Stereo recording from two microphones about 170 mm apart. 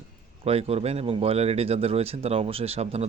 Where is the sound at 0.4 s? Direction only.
35° right (ahead or behind).